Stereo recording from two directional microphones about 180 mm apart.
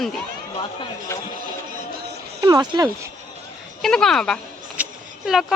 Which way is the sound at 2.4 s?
20° right (ahead or behind).